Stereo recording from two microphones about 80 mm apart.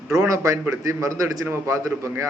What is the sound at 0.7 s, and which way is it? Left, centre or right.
Speech, right.